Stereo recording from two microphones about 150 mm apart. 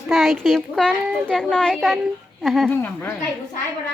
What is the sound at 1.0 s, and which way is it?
Speech, 10° right (ahead or behind).